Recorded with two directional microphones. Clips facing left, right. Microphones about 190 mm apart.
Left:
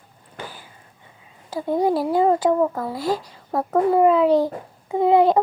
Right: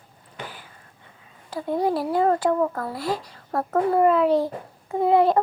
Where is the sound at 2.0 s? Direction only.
5° left (ahead or behind).